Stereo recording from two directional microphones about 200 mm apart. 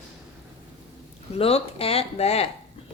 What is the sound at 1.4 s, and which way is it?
Speech, 30° left (ahead or behind).